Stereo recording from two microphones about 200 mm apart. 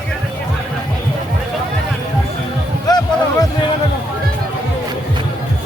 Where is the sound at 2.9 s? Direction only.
20° left (ahead or behind).